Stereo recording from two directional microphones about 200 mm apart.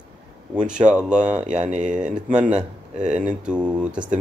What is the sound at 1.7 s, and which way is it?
A man's voice, 35° right (ahead or behind).